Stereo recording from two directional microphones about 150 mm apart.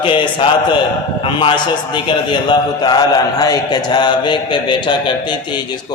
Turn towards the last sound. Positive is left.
turn(degrees=30)  # may be behind; listen again after turning